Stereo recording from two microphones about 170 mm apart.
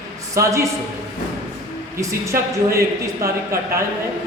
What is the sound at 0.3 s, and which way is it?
Speech, 20° right (ahead or behind).